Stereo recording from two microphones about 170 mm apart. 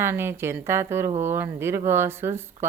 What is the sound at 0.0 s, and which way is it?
Speech, 15° right (ahead or behind).